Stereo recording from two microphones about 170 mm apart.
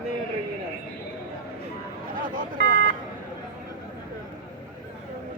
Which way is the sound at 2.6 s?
80° left.